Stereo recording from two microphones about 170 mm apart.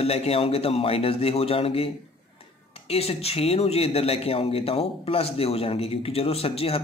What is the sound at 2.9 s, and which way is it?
A man's voice, 35° left (ahead or behind).